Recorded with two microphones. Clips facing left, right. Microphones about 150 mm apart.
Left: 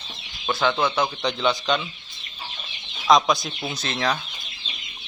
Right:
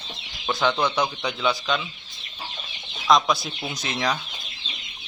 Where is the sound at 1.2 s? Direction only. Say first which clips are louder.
Left 2 dB; 5° right (ahead or behind).